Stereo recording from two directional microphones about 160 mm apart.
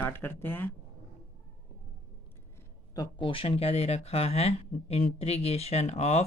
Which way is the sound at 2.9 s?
30° left (ahead or behind).